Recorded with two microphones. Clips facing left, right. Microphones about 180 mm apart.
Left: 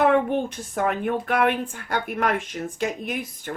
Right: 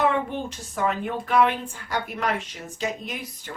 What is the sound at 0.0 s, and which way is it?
Speech, 55° left (ahead or behind).